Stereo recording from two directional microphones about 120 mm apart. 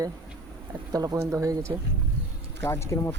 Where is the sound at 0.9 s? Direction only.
30° right (ahead or behind).